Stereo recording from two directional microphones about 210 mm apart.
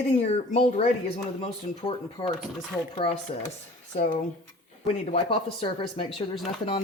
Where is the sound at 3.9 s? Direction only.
35° left (ahead or behind).